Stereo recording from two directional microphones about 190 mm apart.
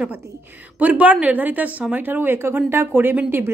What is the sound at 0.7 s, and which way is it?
A woman's voice, 10° right (ahead or behind).